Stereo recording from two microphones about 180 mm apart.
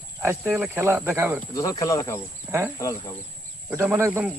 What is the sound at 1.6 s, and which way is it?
Speech, 20° left (ahead or behind).